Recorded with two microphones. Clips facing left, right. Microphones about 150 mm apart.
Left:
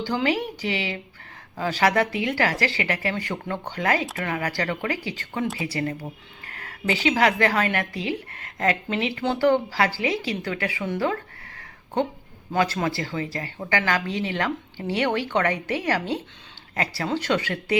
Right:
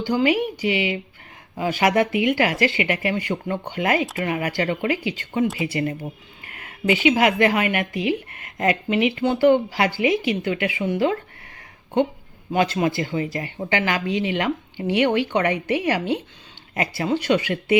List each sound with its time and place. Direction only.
0.0 s speech: 15° right (ahead or behind)
6.6 s speech: 15° right (ahead or behind)
12.5 s speech: 20° right (ahead or behind)